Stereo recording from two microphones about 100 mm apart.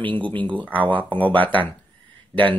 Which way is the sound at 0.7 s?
15° left (ahead or behind).